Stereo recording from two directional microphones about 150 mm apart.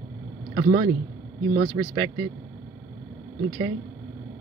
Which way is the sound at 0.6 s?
40° right (ahead or behind).